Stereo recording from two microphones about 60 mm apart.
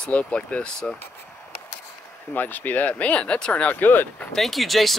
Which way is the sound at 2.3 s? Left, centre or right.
Left.